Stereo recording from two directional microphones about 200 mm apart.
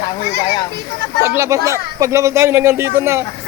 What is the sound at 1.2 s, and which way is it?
Speech, 15° right (ahead or behind).